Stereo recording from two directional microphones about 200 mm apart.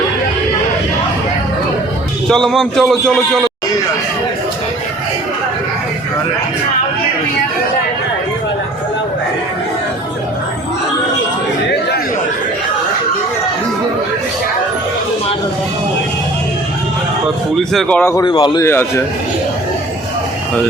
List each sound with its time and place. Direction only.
2.3 s a man's voice: centre (ahead or behind)
17.6 s a man's voice: centre (ahead or behind)
18.3 s a man's voice: 25° left (ahead or behind)